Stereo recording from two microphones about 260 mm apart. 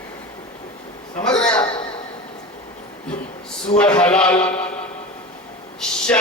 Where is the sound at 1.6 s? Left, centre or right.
Left.